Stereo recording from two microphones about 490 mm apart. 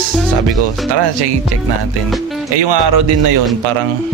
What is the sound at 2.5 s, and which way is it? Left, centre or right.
Speech, right.